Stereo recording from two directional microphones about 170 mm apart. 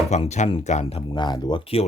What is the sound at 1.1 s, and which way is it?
Speech, 25° left (ahead or behind).